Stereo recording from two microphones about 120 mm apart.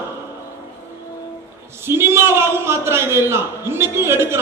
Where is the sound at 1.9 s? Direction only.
20° right (ahead or behind).